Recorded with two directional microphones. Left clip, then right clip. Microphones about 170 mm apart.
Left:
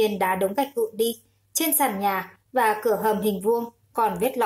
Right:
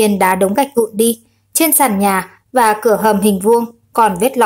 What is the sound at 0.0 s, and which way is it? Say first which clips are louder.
A woman's voice: right 10 dB; 30° right (ahead or behind).